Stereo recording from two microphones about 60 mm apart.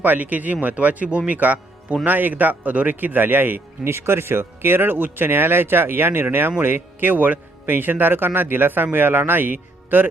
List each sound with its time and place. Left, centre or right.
0.0 s a man's voice: right
3.8 s speech: right